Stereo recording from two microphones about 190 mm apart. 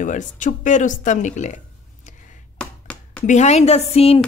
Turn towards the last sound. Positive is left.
turn(degrees=30)  # may be behind; listen again after turning